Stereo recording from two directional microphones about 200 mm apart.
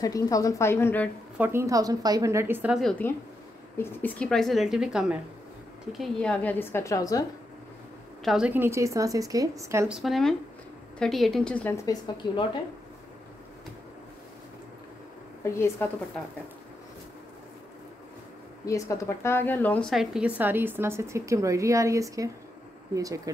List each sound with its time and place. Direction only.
0.0 s a woman's voice: 15° left (ahead or behind)
1.4 s a woman's voice: 15° right (ahead or behind); by 7.2 s 15° left (ahead or behind)
8.2 s a woman's voice: centre (ahead or behind)
9.9 s a woman's voice: centre (ahead or behind); by 12.4 s 20° left (ahead or behind)
15.8 s a woman's voice: 10° left (ahead or behind)
18.7 s a woman's voice: 15° left (ahead or behind); by 23.3 s 15° right (ahead or behind)